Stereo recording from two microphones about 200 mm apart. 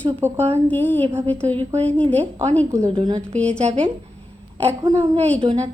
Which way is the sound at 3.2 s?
5° left (ahead or behind).